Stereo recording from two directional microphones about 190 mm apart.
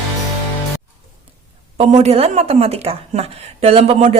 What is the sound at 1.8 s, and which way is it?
A woman's voice, 35° right (ahead or behind).